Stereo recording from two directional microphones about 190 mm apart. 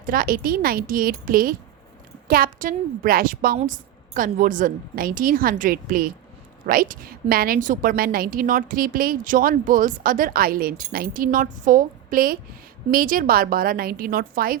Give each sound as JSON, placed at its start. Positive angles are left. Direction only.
{"t": 0.0, "sound": "a woman's voice", "side_deg": -50}